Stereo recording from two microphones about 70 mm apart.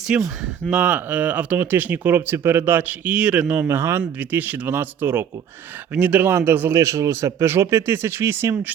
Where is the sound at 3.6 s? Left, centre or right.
Right.